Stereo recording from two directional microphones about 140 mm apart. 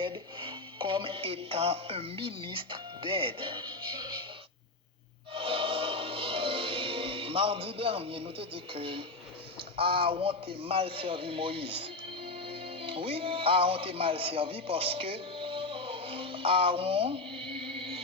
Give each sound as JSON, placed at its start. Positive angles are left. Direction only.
{"t": 0.0, "sound": "speech", "side_deg": -35}
{"t": 5.3, "sound": "music", "side_deg": -40}
{"t": 9.6, "sound": "a man's voice", "side_deg": -40}